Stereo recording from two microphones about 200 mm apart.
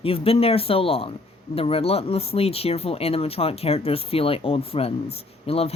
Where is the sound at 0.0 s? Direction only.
30° left (ahead or behind).